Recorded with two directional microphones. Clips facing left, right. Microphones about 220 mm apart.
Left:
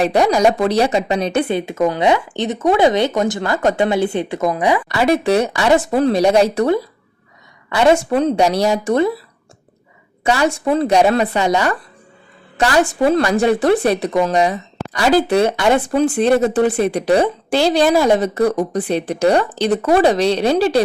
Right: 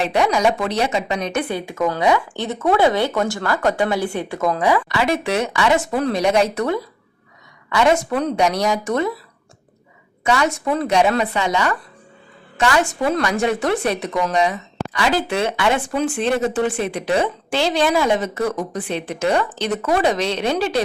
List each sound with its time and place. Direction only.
0.0 s speech: 40° left (ahead or behind); by 4.8 s 15° left (ahead or behind)
4.9 s a woman's voice: 35° left (ahead or behind)
10.2 s a woman's voice: 30° left (ahead or behind)